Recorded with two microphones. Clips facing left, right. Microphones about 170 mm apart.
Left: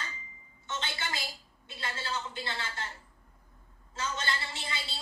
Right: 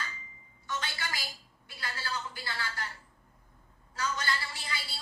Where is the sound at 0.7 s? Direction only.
25° left (ahead or behind).